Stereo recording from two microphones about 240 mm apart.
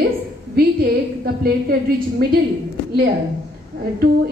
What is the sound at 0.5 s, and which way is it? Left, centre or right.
A woman's voice, right.